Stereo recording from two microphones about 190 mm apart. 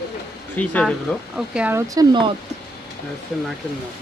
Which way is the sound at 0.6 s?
5° left (ahead or behind).